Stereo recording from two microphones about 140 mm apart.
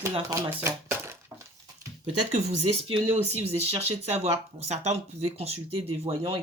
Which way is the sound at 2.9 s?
45° right (ahead or behind).